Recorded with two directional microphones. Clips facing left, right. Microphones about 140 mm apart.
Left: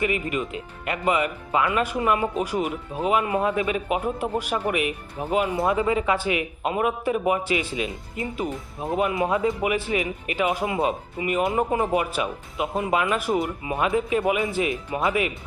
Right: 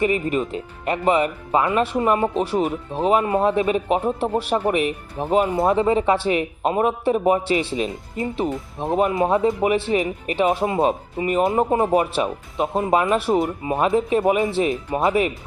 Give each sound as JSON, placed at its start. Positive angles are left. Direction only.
{"t": 0.0, "sound": "speech", "side_deg": -35}
{"t": 8.5, "sound": "speech", "side_deg": -25}
{"t": 10.8, "sound": "speech", "side_deg": -35}